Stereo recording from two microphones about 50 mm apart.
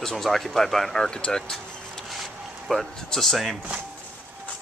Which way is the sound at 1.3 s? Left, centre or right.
Centre.